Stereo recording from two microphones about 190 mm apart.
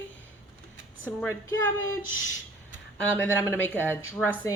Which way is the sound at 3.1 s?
10° left (ahead or behind).